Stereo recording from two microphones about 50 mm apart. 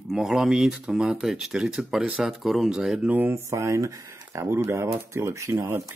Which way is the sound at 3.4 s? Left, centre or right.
Right.